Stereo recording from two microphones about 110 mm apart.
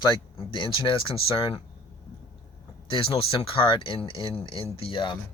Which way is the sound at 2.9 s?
55° left (ahead or behind).